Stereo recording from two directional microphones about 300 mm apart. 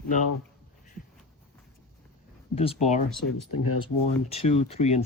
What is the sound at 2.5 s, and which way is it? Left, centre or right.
Speech, centre.